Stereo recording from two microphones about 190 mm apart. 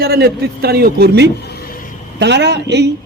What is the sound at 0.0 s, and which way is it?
Speech, 55° right (ahead or behind).